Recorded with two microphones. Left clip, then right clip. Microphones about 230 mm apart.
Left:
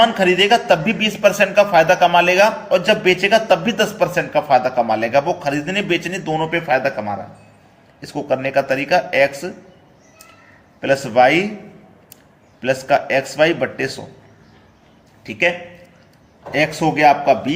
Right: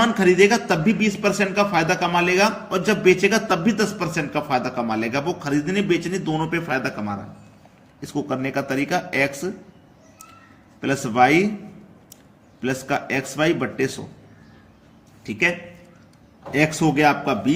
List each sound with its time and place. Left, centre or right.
0.0 s a man's voice: right
10.8 s a man's voice: right
12.6 s a man's voice: right
15.2 s a man's voice: right